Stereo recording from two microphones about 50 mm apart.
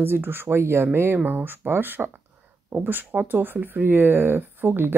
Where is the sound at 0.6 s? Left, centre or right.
Right.